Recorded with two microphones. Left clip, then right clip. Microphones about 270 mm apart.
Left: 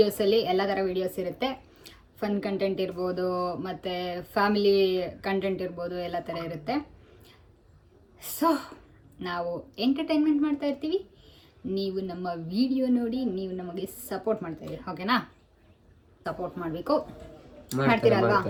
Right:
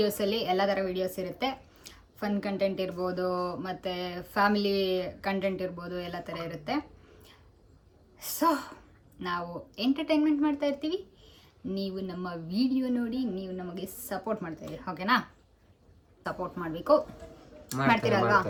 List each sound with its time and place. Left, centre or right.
0.0 s a woman's voice: centre
8.2 s a woman's voice: centre
16.2 s a woman's voice: centre